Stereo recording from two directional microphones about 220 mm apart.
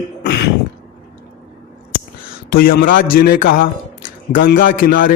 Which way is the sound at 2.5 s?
45° left (ahead or behind).